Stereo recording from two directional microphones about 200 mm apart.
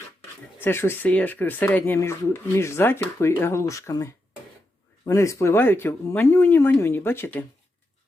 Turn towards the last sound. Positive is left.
turn(degrees=10)  # may be behind; listen again after turning